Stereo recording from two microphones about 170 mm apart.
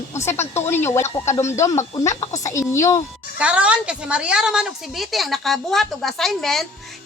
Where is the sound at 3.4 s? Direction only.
5° right (ahead or behind).